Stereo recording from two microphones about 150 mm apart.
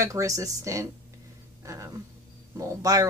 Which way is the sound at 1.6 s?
20° right (ahead or behind).